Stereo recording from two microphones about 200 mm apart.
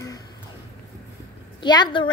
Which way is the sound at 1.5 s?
20° left (ahead or behind).